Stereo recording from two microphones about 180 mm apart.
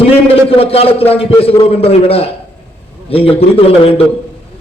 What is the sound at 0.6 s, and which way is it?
A man's voice, 35° left (ahead or behind).